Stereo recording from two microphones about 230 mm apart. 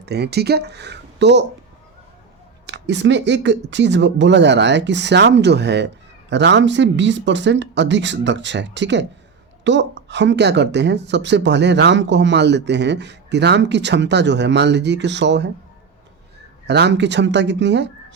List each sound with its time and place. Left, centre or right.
0.0 s speech: right
2.6 s speech: right
16.6 s speech: right